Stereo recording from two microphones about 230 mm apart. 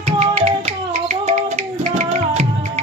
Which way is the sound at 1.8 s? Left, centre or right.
Right.